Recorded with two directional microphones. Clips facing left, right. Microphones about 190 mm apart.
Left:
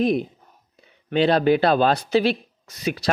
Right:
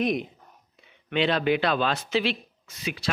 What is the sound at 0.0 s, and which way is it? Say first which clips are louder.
Speech: left 5 dB; 30° left (ahead or behind).